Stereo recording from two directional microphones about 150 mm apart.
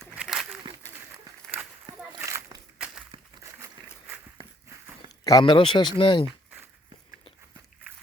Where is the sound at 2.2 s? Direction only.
20° right (ahead or behind).